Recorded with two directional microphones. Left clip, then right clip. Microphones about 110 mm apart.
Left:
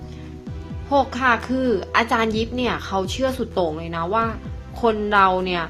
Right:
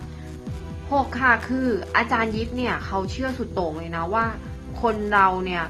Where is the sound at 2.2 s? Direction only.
50° left (ahead or behind).